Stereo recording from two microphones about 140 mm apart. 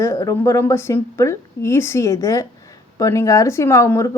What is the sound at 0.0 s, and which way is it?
A woman's voice, 20° left (ahead or behind).